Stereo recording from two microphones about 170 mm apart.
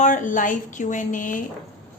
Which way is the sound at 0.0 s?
50° left (ahead or behind).